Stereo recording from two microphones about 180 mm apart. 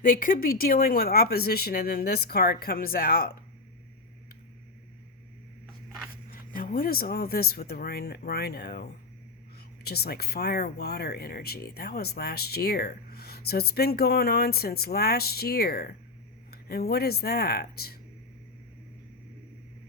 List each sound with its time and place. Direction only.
0.0 s speech: 50° left (ahead or behind)
6.5 s speech: 50° left (ahead or behind)